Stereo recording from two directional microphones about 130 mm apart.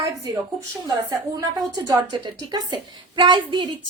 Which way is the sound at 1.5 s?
30° right (ahead or behind).